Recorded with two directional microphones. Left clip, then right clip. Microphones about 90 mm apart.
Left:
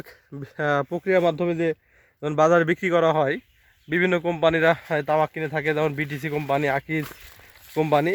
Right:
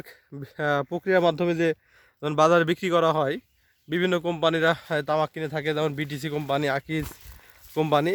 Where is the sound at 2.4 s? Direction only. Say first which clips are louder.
Left 1 dB; 35° right (ahead or behind).